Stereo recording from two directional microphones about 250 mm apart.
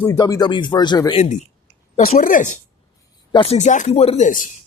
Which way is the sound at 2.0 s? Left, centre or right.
Left.